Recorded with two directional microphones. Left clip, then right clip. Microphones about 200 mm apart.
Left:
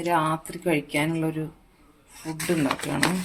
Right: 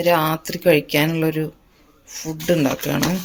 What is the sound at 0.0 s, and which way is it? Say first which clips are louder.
Speech: right 6 dB; 50° right (ahead or behind).